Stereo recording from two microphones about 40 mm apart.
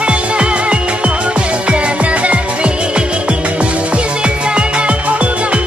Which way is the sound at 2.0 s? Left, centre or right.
Right.